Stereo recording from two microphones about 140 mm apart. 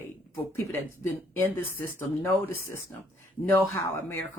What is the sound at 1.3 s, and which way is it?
Speech, 15° left (ahead or behind).